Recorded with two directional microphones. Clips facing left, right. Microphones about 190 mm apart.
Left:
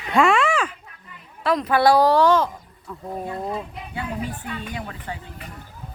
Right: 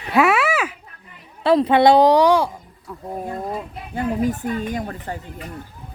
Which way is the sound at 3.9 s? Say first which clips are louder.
Right 8 dB; 45° right (ahead or behind).